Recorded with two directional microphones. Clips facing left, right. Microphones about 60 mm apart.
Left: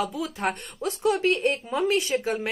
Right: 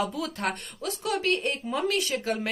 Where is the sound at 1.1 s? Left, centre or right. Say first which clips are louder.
Left 3 dB; centre.